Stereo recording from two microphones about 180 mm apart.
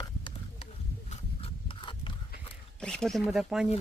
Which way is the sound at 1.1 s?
30° left (ahead or behind).